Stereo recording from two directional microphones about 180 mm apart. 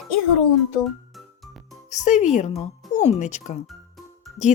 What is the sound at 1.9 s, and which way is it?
Speech, 40° left (ahead or behind).